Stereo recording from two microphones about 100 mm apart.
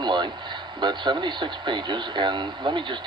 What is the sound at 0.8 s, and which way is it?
Speech, 50° right (ahead or behind).